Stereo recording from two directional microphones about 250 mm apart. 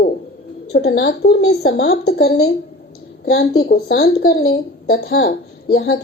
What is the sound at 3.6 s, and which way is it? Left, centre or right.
A woman's voice, left.